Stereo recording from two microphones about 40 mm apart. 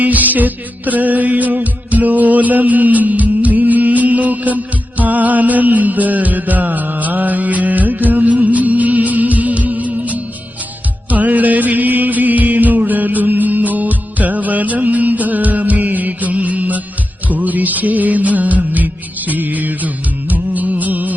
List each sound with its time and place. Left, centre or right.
0.0 s music: right